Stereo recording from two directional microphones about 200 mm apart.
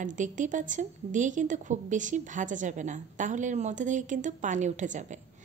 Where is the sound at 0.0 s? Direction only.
40° right (ahead or behind).